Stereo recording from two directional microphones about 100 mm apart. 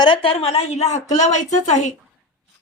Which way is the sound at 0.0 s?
60° left (ahead or behind).